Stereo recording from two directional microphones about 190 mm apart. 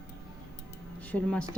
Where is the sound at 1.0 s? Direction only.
5° left (ahead or behind).